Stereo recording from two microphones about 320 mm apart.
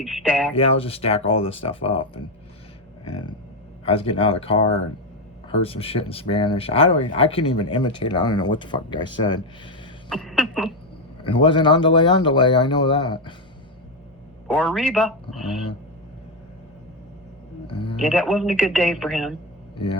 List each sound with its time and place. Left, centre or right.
0.0 s speech: centre
0.5 s speech: centre
3.8 s speech: centre
10.1 s speech: centre
11.2 s speech: centre
14.5 s speech: centre
17.7 s speech: centre
17.9 s speech: centre
19.7 s speech: centre